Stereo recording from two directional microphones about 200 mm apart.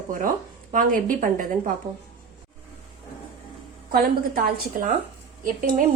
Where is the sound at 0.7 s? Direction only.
45° right (ahead or behind).